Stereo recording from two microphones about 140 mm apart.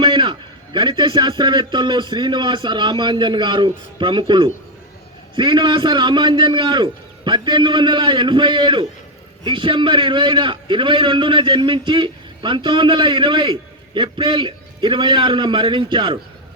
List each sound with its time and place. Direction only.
0.0 s a man's voice: 35° right (ahead or behind)